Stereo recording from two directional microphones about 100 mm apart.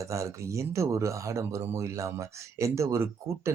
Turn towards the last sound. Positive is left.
turn(degrees=-30)  # may be behind; listen again after turning